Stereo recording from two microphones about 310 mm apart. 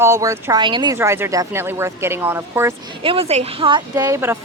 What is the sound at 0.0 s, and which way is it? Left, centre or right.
Speech, centre.